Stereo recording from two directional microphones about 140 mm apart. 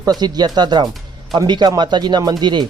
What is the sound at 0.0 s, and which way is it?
Speech, 30° right (ahead or behind).